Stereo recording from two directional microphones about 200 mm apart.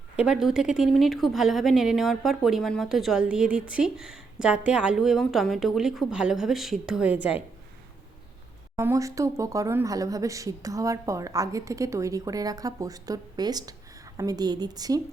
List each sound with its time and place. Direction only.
0.2 s a woman's voice: 5° right (ahead or behind)
8.7 s speech: 15° right (ahead or behind)